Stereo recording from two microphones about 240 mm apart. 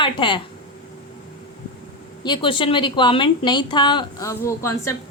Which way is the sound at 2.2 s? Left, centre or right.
Centre.